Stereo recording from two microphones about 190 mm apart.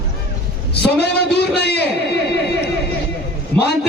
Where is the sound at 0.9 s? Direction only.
60° left (ahead or behind).